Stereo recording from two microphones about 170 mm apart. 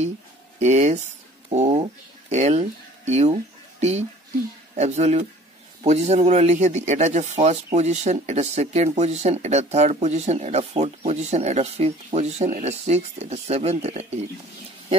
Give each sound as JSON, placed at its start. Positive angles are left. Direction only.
{"t": 0.6, "sound": "speech", "side_deg": -40}
{"t": 4.7, "sound": "speech", "side_deg": -40}